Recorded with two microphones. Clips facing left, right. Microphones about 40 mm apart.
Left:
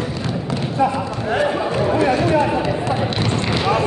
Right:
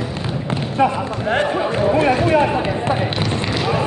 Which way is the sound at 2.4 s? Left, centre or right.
Right.